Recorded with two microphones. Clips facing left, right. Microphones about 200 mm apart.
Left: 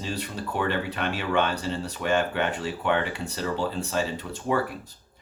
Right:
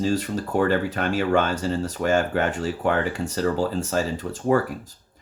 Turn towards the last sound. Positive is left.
turn(degrees=-45)  # may be behind; listen again after turning